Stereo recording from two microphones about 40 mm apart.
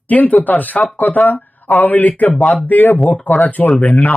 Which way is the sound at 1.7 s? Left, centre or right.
Left.